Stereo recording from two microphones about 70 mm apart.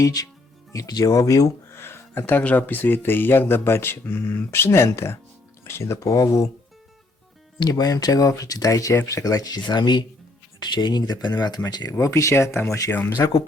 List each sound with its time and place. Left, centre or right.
0.0 s speech: left
1.7 s a sound: left
2.4 s speech: left
7.6 s speech: left
11.9 s speech: left
13.1 s speech: left